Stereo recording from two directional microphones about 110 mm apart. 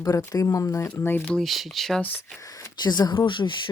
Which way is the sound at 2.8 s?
40° left (ahead or behind).